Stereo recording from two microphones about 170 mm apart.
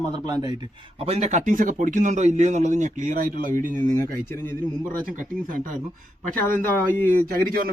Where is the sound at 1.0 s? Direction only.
40° right (ahead or behind).